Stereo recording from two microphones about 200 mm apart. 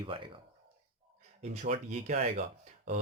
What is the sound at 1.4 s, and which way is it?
Speech, 35° right (ahead or behind).